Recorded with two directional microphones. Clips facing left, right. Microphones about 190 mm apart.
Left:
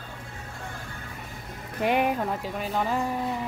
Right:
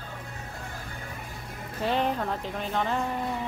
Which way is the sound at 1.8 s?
15° left (ahead or behind).